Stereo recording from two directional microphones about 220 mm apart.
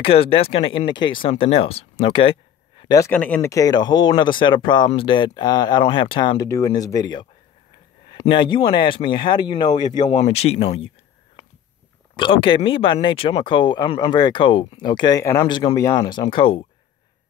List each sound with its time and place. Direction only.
0.0 s speech: 25° left (ahead or behind)
10.0 s speech: 30° left (ahead or behind)
12.2 s speech: 25° left (ahead or behind)